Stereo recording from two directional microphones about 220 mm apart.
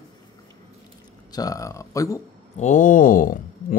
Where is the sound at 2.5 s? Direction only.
35° left (ahead or behind).